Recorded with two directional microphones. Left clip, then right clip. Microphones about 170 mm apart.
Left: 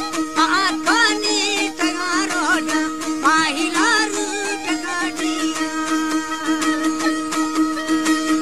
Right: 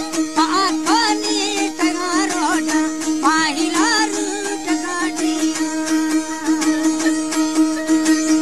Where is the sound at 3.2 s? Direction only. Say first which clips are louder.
Even; 75° right (ahead or behind).